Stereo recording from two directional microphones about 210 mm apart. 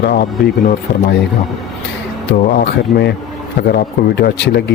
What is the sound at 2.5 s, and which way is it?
Speech, 55° left (ahead or behind).